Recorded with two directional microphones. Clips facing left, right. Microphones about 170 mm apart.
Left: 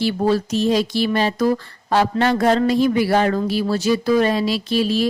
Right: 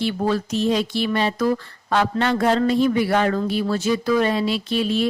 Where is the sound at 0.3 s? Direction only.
35° left (ahead or behind).